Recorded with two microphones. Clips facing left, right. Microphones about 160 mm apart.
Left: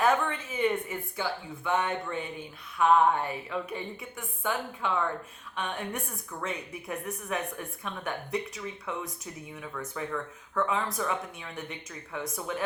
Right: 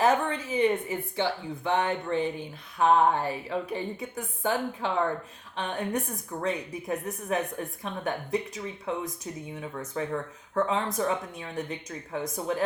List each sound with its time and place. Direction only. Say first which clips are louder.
0.0 s a woman's voice: right 2 dB; 35° right (ahead or behind)